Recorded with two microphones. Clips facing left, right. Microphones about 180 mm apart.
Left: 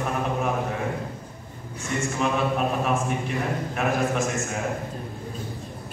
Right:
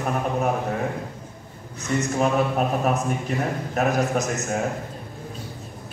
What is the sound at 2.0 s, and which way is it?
Speech, 40° right (ahead or behind).